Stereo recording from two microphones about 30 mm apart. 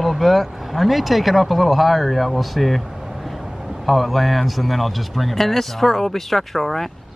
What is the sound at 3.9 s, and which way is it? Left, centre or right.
Speech, centre.